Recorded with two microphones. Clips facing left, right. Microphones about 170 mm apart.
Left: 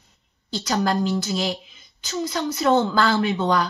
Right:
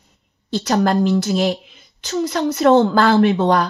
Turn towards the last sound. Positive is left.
turn(degrees=-60)  # may be behind; listen again after turning